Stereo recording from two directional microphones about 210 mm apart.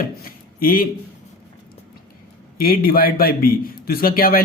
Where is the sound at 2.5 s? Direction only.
45° left (ahead or behind).